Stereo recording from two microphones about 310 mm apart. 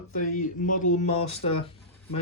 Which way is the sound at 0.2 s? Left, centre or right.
Left.